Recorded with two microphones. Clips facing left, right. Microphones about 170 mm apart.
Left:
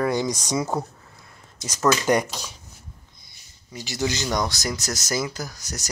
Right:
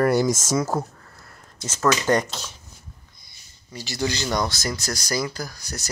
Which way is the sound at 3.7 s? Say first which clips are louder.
Even; 15° left (ahead or behind).